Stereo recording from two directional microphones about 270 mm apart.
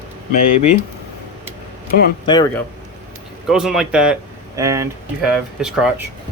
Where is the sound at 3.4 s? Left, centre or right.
Centre.